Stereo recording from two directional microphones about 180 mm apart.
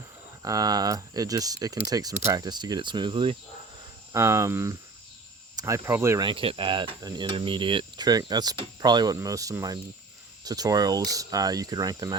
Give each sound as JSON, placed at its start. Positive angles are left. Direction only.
{"t": 0.4, "sound": "speech", "side_deg": -20}
{"t": 4.1, "sound": "speech", "side_deg": -15}
{"t": 6.2, "sound": "speech", "side_deg": -30}